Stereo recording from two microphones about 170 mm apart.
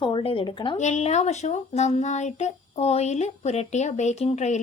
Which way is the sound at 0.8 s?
45° left (ahead or behind).